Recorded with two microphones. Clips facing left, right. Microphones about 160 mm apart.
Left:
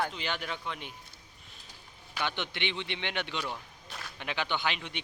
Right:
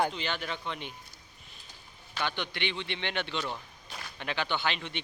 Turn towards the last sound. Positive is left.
turn(degrees=10)  # may be behind; listen again after turning